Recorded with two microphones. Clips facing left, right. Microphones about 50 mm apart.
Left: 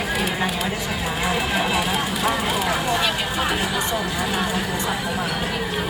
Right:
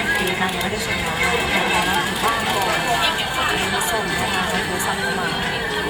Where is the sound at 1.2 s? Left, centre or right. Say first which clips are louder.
Right 2 dB; right.